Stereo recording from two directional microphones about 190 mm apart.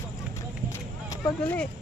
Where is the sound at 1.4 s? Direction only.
5° left (ahead or behind).